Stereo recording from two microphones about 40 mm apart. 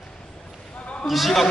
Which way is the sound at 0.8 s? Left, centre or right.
Left.